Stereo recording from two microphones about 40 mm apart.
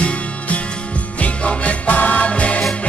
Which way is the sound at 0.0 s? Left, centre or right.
Left.